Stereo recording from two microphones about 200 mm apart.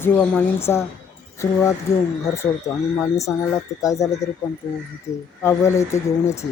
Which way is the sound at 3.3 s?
Centre (ahead or behind).